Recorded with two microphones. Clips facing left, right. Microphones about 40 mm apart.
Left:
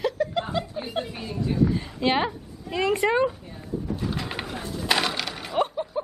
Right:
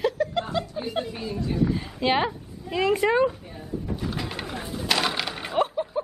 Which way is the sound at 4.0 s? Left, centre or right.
Centre.